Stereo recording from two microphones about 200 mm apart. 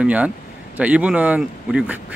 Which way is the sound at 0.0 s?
5° right (ahead or behind).